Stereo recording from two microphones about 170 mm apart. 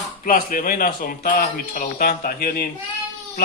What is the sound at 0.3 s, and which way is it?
Speech, 55° left (ahead or behind).